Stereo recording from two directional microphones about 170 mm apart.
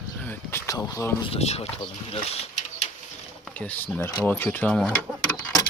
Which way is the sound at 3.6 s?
10° left (ahead or behind).